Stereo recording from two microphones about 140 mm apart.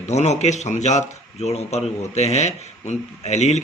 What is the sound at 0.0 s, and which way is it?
Speech, 55° left (ahead or behind).